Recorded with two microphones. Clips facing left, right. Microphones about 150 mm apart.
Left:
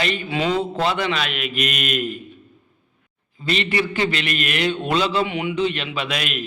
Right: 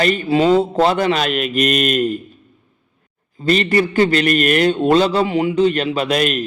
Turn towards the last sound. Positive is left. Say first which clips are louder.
# right 9 dB
turn(degrees=-40)  # may be behind; listen again after turning